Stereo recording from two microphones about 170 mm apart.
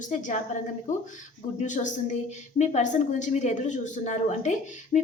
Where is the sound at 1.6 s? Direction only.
45° left (ahead or behind).